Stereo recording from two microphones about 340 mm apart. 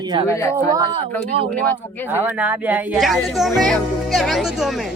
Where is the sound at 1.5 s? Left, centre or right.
Centre.